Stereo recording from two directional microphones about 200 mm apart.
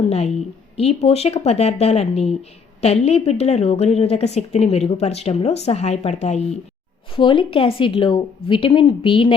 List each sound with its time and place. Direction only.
0.1 s a woman's voice: 30° left (ahead or behind)
7.2 s a woman's voice: 25° left (ahead or behind)